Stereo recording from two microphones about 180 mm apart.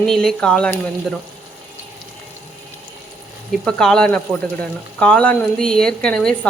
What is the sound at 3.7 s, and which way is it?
Speech, 5° left (ahead or behind).